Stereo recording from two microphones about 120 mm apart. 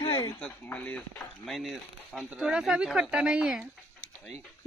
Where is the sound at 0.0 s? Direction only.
30° left (ahead or behind).